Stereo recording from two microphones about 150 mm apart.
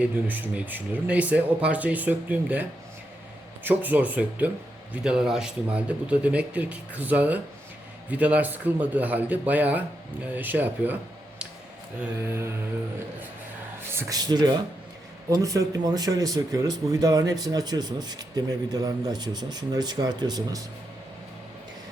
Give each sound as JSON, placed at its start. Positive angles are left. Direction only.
{"t": 0.0, "sound": "speech", "side_deg": -10}
{"t": 12.3, "sound": "speech", "side_deg": -15}
{"t": 13.9, "sound": "speech", "side_deg": -20}